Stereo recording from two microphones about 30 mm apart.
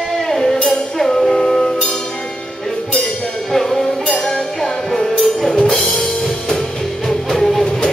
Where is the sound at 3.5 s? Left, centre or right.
Centre.